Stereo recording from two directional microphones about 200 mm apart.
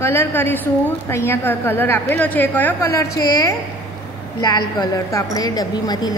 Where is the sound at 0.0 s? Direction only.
15° left (ahead or behind).